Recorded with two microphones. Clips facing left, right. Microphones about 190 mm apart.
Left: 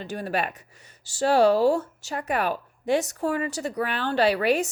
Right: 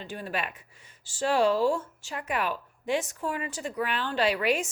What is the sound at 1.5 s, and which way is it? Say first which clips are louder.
Speech: left 5 dB; 70° left (ahead or behind).